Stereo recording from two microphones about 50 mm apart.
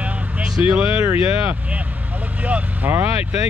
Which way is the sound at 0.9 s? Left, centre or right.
Right.